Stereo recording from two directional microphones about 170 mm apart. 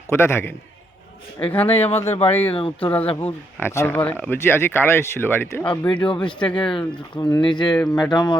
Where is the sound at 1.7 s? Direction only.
35° left (ahead or behind).